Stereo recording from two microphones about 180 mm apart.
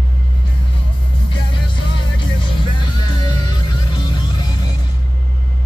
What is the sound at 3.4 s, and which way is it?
Music, 25° left (ahead or behind).